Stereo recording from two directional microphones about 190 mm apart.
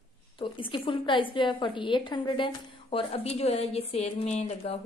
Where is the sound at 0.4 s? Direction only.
25° left (ahead or behind).